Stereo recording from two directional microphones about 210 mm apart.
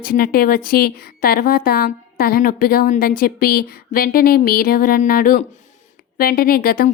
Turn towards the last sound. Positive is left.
turn(degrees=45)  # may be behind; listen again after turning